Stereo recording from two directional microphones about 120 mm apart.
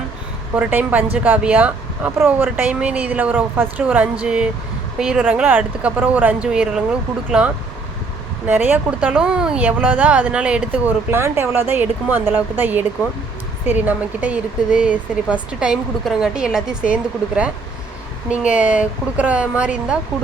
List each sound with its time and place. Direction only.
0.5 s speech: 15° right (ahead or behind)